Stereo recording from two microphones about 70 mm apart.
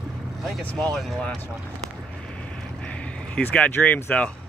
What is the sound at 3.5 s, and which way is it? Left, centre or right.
Speech, left.